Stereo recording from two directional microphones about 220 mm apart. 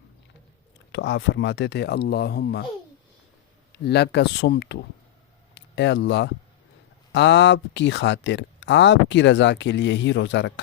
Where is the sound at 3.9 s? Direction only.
50° left (ahead or behind).